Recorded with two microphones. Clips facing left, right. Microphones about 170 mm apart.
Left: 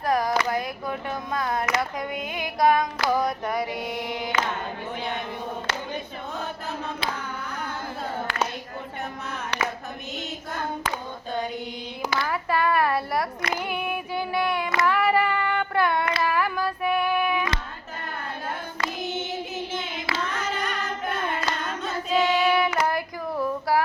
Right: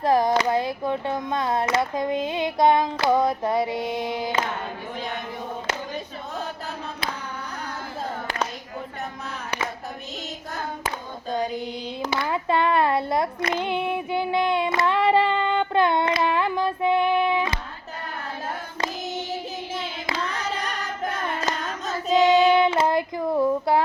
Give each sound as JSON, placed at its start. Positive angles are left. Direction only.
{"t": 0.0, "sound": "speech", "side_deg": -25}
{"t": 12.1, "sound": "speech", "side_deg": -25}
{"t": 13.6, "sound": "child singing", "side_deg": -25}
{"t": 20.3, "sound": "singing", "side_deg": -35}
{"t": 22.2, "sound": "child singing", "side_deg": -20}